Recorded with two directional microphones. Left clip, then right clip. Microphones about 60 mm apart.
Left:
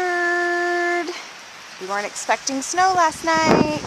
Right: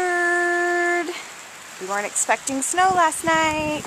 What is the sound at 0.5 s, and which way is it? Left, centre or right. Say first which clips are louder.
Music: even; left.